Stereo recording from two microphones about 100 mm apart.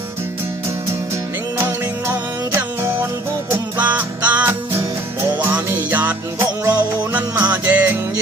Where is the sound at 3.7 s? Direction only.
15° right (ahead or behind).